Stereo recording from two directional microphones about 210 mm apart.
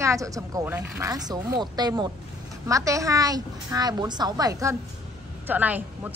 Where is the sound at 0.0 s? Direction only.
15° right (ahead or behind).